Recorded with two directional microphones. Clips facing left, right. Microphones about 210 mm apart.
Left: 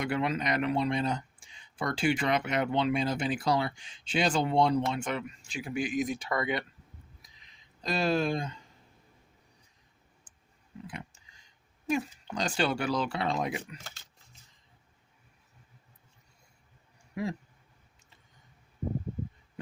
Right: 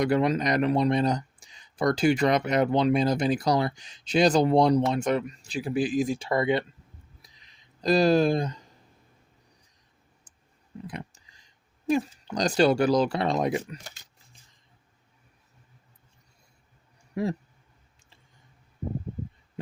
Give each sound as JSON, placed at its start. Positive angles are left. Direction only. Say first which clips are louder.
{"t": 0.0, "sound": "speech", "louder": "right 7 dB", "side_deg": -40}
{"t": 7.8, "sound": "speech", "louder": "right 8 dB", "side_deg": -40}
{"t": 10.8, "sound": "speech", "louder": "right 5 dB", "side_deg": -40}
{"t": 13.8, "sound": "speech", "louder": "right 2 dB", "side_deg": -15}